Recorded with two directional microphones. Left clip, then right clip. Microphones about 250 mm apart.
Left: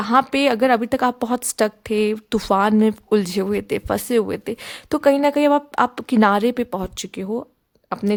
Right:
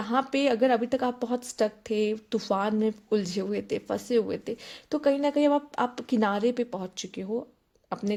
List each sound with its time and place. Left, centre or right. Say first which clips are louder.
0.0 s a woman's voice: left 9 dB; left